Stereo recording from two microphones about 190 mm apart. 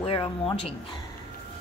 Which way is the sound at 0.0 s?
30° left (ahead or behind).